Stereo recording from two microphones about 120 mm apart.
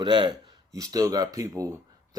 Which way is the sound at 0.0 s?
40° right (ahead or behind).